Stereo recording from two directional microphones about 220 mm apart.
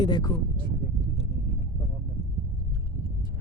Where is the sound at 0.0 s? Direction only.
20° left (ahead or behind).